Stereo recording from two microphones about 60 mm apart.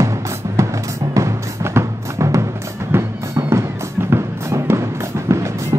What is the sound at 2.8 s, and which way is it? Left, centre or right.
Music, right.